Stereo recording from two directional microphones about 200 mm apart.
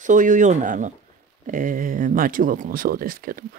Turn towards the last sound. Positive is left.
turn(degrees=-45)  # may be behind; listen again after turning